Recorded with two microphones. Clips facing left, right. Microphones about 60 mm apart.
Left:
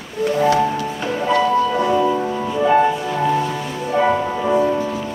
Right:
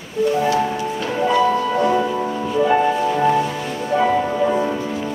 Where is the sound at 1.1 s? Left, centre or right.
Centre.